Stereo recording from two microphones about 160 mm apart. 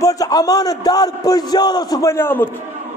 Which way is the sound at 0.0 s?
20° left (ahead or behind).